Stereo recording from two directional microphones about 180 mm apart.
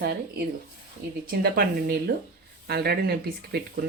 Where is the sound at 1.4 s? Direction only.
55° right (ahead or behind).